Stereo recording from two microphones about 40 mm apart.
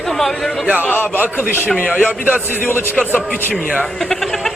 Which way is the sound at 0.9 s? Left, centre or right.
Left.